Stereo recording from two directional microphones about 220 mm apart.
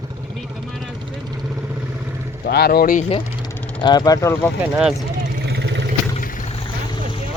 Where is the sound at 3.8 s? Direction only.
20° left (ahead or behind).